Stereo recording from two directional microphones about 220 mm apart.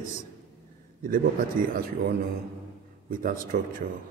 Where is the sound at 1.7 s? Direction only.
40° right (ahead or behind).